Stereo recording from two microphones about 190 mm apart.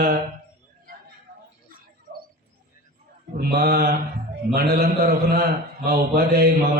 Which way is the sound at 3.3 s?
55° right (ahead or behind).